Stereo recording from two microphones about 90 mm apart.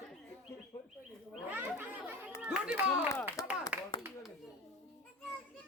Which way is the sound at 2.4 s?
10° right (ahead or behind).